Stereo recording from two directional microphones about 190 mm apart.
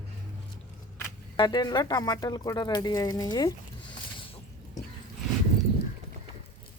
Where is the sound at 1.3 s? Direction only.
20° left (ahead or behind).